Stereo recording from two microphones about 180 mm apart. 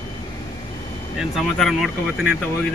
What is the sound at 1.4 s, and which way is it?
Speech, centre (ahead or behind).